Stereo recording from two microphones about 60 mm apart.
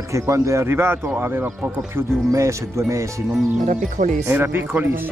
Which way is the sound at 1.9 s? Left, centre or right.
Right.